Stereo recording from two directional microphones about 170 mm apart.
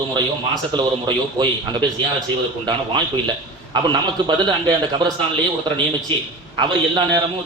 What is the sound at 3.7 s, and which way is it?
A man's voice, 25° right (ahead or behind).